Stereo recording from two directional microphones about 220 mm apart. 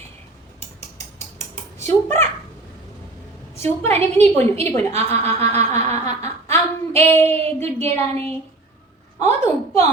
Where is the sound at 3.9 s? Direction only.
30° right (ahead or behind).